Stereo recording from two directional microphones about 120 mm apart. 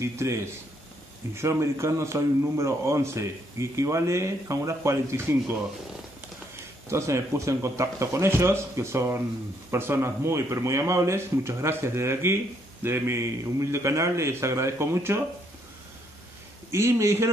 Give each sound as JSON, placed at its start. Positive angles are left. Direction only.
{"t": 0.0, "sound": "a man's voice", "side_deg": -25}
{"t": 6.9, "sound": "a man's voice", "side_deg": -25}
{"t": 16.7, "sound": "a man's voice", "side_deg": -25}